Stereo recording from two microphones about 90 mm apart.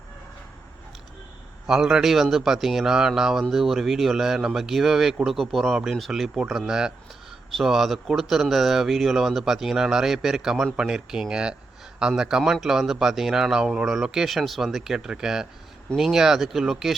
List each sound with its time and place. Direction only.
1.6 s speech: 5° right (ahead or behind)